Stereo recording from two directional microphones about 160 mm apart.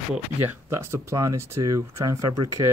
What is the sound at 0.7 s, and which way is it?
Speech, 15° right (ahead or behind).